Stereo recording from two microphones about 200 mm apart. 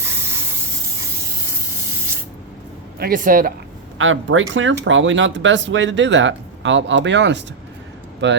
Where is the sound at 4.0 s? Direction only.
75° right (ahead or behind); by 8.4 s 60° right (ahead or behind).